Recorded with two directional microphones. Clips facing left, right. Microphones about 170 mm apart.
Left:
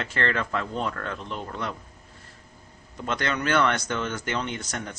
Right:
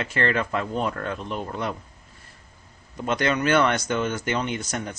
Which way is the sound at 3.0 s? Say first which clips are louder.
Right 5 dB; 15° right (ahead or behind).